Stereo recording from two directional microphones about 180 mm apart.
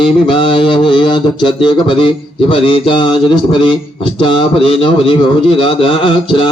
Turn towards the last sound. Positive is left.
turn(degrees=30)  # may be behind; listen again after turning